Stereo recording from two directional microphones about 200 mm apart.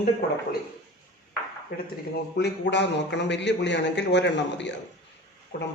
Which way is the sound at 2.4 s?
55° left (ahead or behind).